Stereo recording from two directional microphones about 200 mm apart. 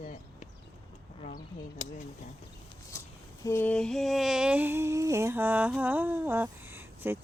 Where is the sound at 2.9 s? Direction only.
15° left (ahead or behind).